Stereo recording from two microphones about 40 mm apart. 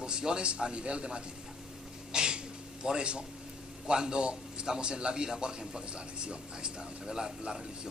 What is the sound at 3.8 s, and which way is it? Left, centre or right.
A man's voice, centre.